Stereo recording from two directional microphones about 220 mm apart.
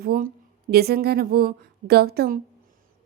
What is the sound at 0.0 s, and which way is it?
A woman's voice, 45° right (ahead or behind).